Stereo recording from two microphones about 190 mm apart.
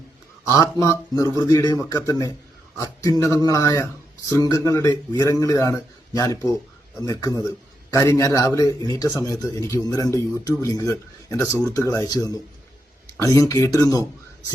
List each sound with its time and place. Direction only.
0.4 s a man's voice: 15° left (ahead or behind)